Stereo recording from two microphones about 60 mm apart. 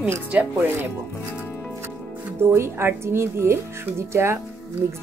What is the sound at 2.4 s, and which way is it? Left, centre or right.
Speech, right.